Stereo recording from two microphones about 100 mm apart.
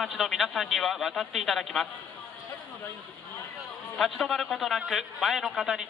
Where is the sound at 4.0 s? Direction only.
5° left (ahead or behind).